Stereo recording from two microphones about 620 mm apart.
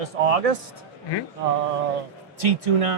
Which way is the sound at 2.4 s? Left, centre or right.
Right.